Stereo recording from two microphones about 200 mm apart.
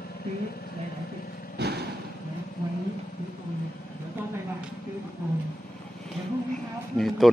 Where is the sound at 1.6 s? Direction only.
55° right (ahead or behind).